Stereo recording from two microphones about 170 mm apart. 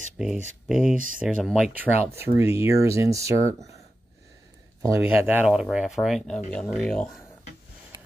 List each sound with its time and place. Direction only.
0.2 s speech: centre (ahead or behind)
0.9 s speech: 50° right (ahead or behind)
1.2 s speech: centre (ahead or behind); by 3.3 s 20° right (ahead or behind)
3.3 s speech: 35° left (ahead or behind)
4.9 s speech: 10° right (ahead or behind)